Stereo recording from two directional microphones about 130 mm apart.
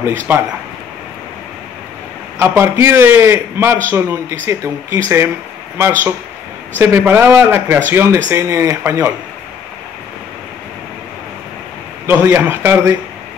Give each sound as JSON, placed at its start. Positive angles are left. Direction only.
{"t": 0.0, "sound": "a man's voice", "side_deg": -20}
{"t": 2.3, "sound": "a man's voice", "side_deg": -20}
{"t": 12.1, "sound": "a man's voice", "side_deg": -15}